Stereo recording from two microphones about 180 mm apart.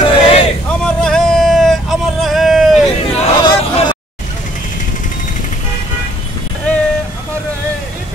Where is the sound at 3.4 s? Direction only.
25° left (ahead or behind).